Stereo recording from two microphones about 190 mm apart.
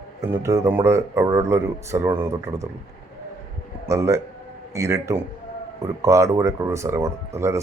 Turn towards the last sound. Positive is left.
turn(degrees=-15)  # may be behind; listen again after turning